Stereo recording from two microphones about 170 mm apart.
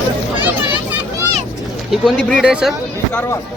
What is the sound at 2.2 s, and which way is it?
Speech, 5° left (ahead or behind).